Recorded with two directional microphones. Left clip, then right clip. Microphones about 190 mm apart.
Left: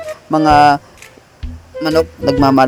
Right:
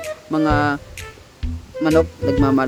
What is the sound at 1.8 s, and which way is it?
Speech, 40° left (ahead or behind).